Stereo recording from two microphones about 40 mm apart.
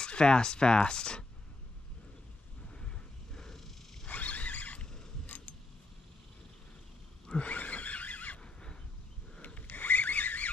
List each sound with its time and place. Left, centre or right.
0.0 s speech: left
2.7 s a sound: centre
4.1 s a sound: left
5.2 s mechanisms: left
7.2 s neigh: left
8.4 s neigh: left
9.4 s rub: left